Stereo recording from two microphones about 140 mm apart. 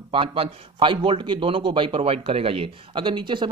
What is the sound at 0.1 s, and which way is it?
A man's voice, 40° right (ahead or behind).